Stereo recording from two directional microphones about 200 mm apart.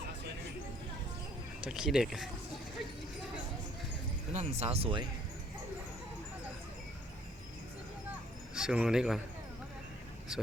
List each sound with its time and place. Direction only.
1.6 s speech: 5° right (ahead or behind)
4.4 s speech: 30° right (ahead or behind)
8.5 s speech: 5° right (ahead or behind)
10.3 s speech: 5° right (ahead or behind)